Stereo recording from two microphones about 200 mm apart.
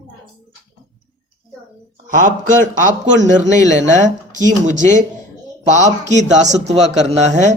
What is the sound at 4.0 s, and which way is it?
Speech, 40° right (ahead or behind).